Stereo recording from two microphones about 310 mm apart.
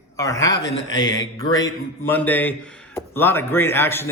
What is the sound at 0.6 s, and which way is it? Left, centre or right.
Speech, left.